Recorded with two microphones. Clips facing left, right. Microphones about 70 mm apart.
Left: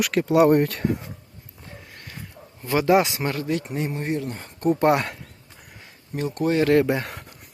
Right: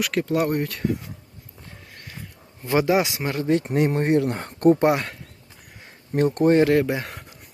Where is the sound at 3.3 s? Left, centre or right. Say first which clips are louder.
Right 4 dB; right.